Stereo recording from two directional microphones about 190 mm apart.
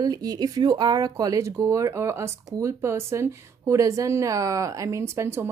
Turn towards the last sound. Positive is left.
turn(degrees=-15)  # may be behind; listen again after turning